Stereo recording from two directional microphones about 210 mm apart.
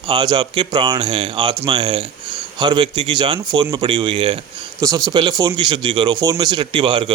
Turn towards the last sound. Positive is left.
turn(degrees=-25)  # may be behind; listen again after turning